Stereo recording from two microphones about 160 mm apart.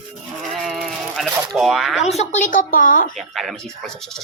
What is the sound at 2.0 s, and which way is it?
A woman's voice, 45° left (ahead or behind).